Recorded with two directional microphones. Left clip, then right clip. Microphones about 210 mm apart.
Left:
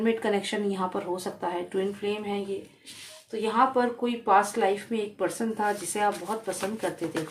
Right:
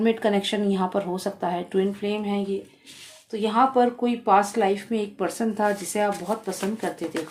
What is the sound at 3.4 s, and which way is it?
Speech, 30° right (ahead or behind).